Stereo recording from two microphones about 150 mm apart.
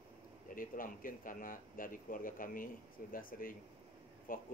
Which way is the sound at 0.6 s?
65° left (ahead or behind).